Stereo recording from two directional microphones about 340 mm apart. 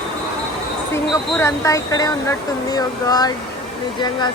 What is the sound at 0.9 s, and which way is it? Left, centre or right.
Speech, centre.